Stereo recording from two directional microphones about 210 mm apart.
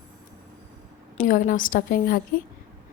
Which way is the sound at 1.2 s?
40° left (ahead or behind).